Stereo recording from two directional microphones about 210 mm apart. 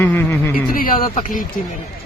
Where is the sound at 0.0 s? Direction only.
10° left (ahead or behind).